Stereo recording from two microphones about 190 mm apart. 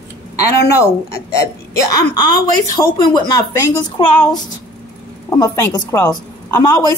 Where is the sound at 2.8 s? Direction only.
20° left (ahead or behind).